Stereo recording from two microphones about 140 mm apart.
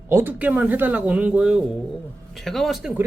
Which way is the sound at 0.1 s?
15° right (ahead or behind).